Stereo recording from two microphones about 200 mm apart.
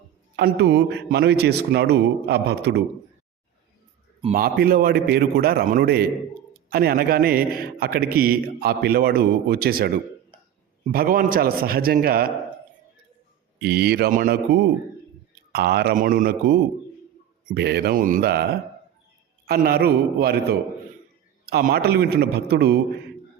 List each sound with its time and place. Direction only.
0.3 s a man's voice: 55° right (ahead or behind)
4.4 s speech: 50° right (ahead or behind)
10.9 s speech: 45° right (ahead or behind)
13.6 s speech: 50° right (ahead or behind)
17.5 s speech: 55° right (ahead or behind)
19.5 s speech: 50° right (ahead or behind)